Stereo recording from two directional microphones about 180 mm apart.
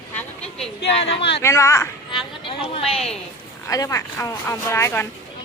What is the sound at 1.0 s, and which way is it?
Speech, 35° left (ahead or behind).